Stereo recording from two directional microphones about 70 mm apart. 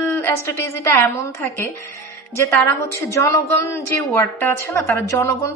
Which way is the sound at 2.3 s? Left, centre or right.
Left.